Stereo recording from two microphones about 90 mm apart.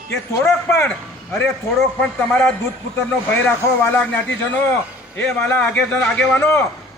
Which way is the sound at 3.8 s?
25° left (ahead or behind).